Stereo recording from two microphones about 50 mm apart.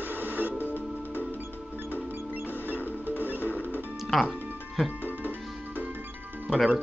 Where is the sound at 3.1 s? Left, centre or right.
Left.